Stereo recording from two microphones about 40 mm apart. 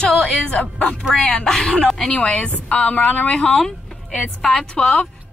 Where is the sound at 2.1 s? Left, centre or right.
Left.